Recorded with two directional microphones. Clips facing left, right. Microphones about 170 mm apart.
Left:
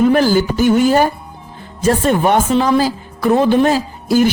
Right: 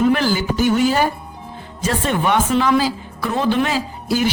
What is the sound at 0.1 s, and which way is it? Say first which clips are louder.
A woman's voice: left 5 dB; 40° left (ahead or behind).